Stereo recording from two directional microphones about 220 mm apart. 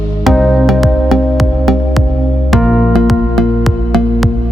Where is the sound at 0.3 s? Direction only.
Centre (ahead or behind).